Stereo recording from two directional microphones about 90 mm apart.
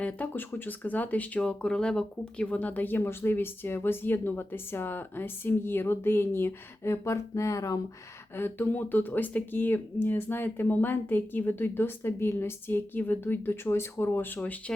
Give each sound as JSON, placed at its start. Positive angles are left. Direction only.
{"t": 0.0, "sound": "speech", "side_deg": 20}
{"t": 8.4, "sound": "speech", "side_deg": 25}